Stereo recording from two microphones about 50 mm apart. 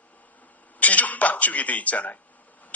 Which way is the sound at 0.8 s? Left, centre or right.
Left.